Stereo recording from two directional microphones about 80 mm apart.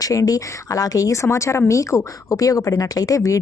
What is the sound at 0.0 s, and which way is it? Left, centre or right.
Speech, left.